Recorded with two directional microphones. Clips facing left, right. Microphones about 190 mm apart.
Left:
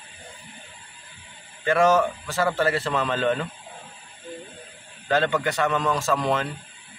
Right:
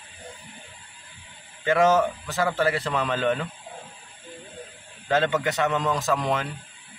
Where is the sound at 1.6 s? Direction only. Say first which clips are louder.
Even; 20° right (ahead or behind).